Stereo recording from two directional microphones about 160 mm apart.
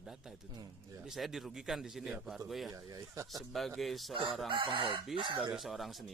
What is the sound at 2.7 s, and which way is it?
Speech, 20° right (ahead or behind).